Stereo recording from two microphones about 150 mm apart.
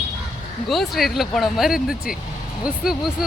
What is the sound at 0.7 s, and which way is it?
Speech, centre (ahead or behind).